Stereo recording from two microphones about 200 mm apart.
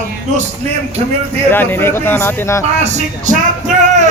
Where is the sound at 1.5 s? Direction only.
10° left (ahead or behind).